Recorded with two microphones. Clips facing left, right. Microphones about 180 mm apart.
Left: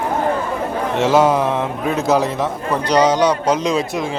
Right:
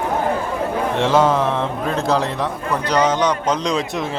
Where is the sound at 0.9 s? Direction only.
5° left (ahead or behind).